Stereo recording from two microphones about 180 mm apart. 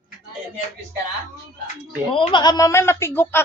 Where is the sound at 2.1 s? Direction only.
30° left (ahead or behind); by 3.4 s 10° left (ahead or behind).